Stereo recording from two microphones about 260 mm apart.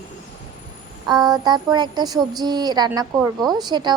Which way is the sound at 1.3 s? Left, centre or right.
Centre.